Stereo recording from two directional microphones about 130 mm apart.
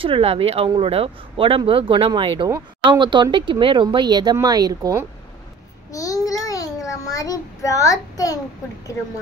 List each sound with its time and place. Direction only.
0.0 s speech: 45° right (ahead or behind); by 5.0 s 30° right (ahead or behind)
5.9 s child singing: 25° left (ahead or behind)